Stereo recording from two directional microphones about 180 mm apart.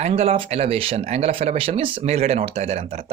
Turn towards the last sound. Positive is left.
turn(degrees=-35)  # may be behind; listen again after turning